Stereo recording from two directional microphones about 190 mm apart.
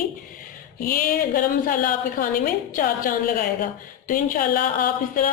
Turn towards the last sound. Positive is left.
turn(degrees=45)  # may be behind; listen again after turning